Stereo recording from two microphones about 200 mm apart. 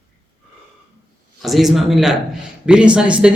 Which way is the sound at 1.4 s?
Centre (ahead or behind).